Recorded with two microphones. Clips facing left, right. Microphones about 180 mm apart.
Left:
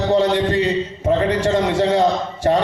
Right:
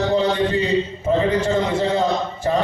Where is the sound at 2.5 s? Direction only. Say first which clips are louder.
Left 4 dB; 65° left (ahead or behind).